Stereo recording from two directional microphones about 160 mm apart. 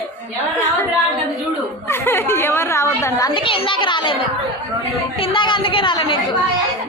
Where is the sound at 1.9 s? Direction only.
15° left (ahead or behind); by 4.2 s 30° left (ahead or behind).